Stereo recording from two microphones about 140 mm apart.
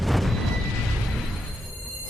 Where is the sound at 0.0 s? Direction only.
Centre (ahead or behind).